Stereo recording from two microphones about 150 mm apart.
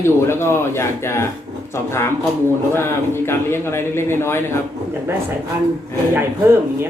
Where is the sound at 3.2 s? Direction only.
15° left (ahead or behind).